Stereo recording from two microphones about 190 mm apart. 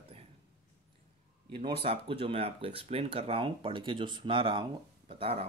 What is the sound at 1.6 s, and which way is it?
Speech, 30° right (ahead or behind).